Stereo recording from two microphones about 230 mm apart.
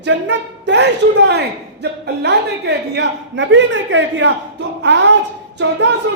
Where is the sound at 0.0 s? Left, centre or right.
Right.